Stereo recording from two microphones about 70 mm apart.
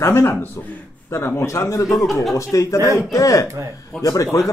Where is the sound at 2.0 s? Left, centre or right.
Centre.